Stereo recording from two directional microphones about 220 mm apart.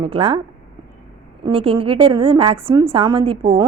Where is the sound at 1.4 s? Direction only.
25° right (ahead or behind).